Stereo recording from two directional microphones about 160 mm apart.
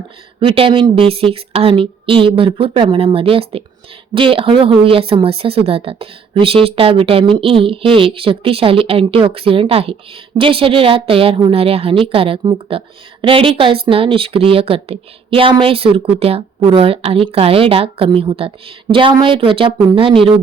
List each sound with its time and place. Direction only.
0.3 s speech: 35° right (ahead or behind)